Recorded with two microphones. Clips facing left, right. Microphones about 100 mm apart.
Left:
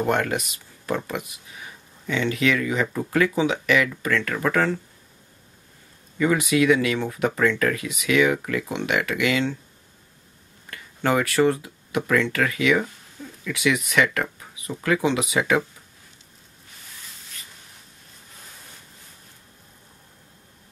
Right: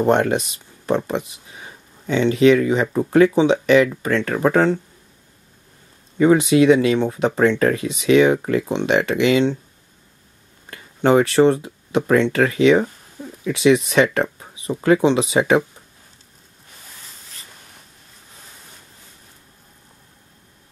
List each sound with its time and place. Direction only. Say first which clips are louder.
0.0 s speech: right 6 dB; 25° right (ahead or behind)
6.1 s speech: right 7 dB; 25° right (ahead or behind)
10.7 s speech: right 7 dB; 25° right (ahead or behind)